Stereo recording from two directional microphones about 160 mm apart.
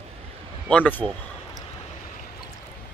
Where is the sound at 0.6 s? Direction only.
10° left (ahead or behind).